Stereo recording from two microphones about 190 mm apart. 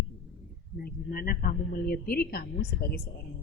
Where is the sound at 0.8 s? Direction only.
50° left (ahead or behind).